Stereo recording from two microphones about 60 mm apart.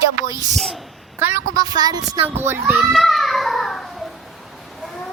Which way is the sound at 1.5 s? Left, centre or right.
Right.